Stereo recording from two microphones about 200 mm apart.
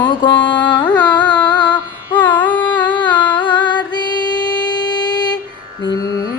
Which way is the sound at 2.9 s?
20° left (ahead or behind).